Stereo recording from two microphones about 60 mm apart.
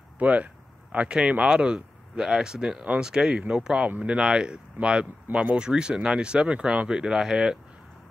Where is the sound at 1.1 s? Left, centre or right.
Centre.